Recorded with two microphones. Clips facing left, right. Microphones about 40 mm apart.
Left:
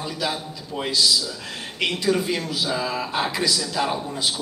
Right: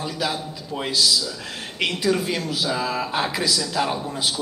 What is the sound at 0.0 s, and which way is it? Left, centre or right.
Speech, centre.